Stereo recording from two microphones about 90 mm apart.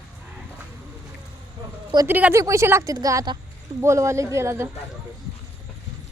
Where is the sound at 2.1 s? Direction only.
20° right (ahead or behind).